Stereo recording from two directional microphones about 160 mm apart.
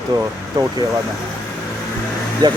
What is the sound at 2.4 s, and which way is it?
Speech, 25° right (ahead or behind).